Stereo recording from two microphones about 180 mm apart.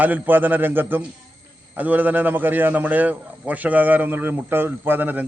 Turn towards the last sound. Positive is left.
turn(degrees=-10)  # may be behind; listen again after turning